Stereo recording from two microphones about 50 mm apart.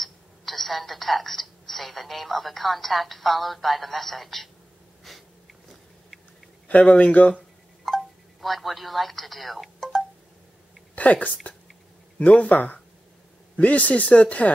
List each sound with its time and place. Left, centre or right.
0.0 s speech: centre
6.7 s speech: left
7.8 s telephone dialing: centre
11.0 s a woman's voice: left